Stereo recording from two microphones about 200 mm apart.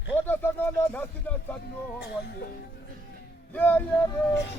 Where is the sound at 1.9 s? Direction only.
55° left (ahead or behind).